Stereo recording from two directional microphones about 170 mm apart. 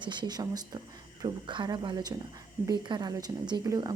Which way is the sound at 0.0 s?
25° right (ahead or behind).